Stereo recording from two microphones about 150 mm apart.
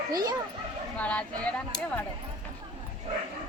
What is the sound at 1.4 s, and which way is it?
Speech, 10° left (ahead or behind).